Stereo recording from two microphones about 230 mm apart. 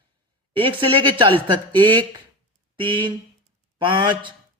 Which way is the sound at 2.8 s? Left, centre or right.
Right.